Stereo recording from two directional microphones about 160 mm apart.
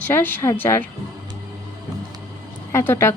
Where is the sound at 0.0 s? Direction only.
10° left (ahead or behind).